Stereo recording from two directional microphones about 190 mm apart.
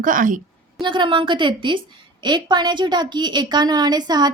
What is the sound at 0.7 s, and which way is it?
A woman's voice, 25° right (ahead or behind).